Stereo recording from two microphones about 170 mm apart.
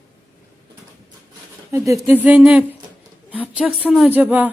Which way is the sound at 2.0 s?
10° right (ahead or behind).